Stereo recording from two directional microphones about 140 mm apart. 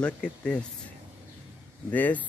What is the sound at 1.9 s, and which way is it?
Speech, 10° left (ahead or behind).